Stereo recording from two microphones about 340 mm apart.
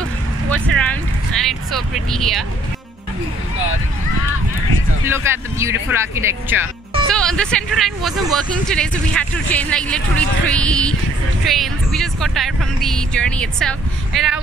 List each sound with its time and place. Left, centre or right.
0.5 s speech: centre
5.0 s speech: centre